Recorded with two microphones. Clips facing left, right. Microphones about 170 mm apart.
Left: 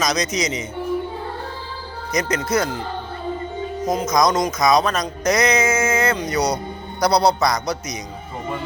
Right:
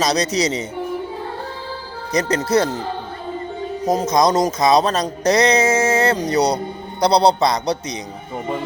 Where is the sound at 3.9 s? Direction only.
35° right (ahead or behind).